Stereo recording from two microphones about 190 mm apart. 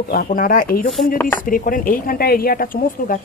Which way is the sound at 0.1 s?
45° left (ahead or behind).